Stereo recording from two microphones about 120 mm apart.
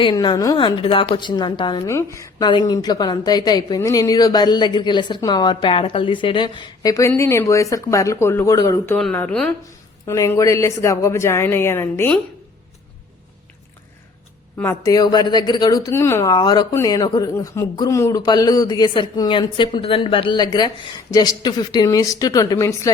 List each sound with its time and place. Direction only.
0.0 s a woman's voice: 40° left (ahead or behind)
1.9 s a woman's voice: 25° left (ahead or behind)
2.4 s a woman's voice: 35° left (ahead or behind)
7.2 s a woman's voice: 25° left (ahead or behind)
8.5 s a woman's voice: 35° left (ahead or behind)
9.3 s a woman's voice: 10° left (ahead or behind)
10.1 s a woman's voice: 20° left (ahead or behind)
14.8 s a woman's voice: 30° left (ahead or behind)
15.9 s a woman's voice: 20° left (ahead or behind)
16.3 s a woman's voice: 35° left (ahead or behind)